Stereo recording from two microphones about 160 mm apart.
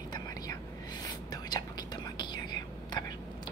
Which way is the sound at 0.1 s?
25° left (ahead or behind).